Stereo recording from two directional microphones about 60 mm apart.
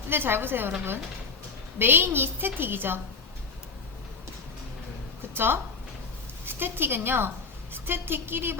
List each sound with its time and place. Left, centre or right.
0.1 s a woman's voice: right
1.8 s a woman's voice: right
5.3 s a woman's voice: right